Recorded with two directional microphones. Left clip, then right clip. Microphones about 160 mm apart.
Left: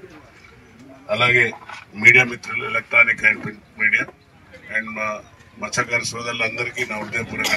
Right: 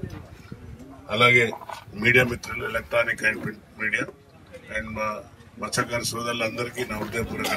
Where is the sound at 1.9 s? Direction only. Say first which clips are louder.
Left 7 dB; 20° left (ahead or behind).